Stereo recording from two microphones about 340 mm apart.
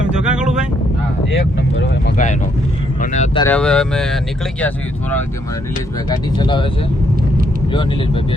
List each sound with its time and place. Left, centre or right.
0.1 s vehicle: centre
1.8 s speech: left
3.4 s speech: centre
6.1 s speech: centre
7.7 s speech: centre